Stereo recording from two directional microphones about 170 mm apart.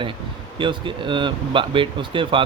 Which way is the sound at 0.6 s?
30° right (ahead or behind).